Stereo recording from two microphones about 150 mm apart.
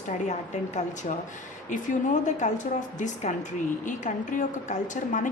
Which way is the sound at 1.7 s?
60° left (ahead or behind).